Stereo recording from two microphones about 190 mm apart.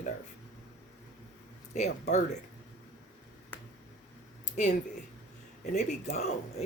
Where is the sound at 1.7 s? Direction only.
35° left (ahead or behind).